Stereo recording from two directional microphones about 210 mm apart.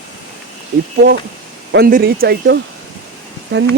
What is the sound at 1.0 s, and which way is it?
Speech, 50° right (ahead or behind).